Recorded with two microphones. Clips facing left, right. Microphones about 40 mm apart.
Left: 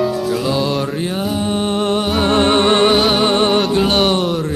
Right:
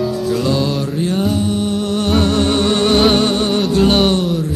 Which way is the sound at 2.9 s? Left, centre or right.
Centre.